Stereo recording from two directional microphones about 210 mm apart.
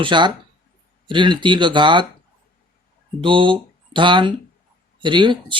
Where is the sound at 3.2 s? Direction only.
25° right (ahead or behind).